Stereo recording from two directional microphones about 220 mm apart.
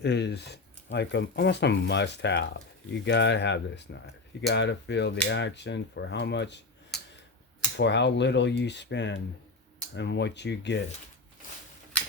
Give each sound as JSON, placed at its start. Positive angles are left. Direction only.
{"t": 0.0, "sound": "speech", "side_deg": 50}
{"t": 7.8, "sound": "speech", "side_deg": 55}